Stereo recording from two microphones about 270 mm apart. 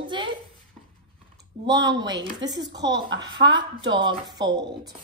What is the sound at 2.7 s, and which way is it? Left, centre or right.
Speech, right.